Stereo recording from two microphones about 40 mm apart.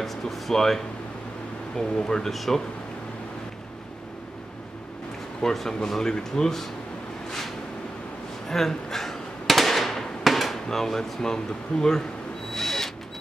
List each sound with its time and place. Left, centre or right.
0.0 s speech: centre
2.3 s speech: centre
5.4 s speech: centre
8.5 s firecracker: centre
12.5 s drill: centre